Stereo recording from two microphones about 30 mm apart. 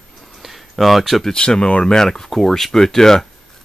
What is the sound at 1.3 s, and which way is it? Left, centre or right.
Speech, left.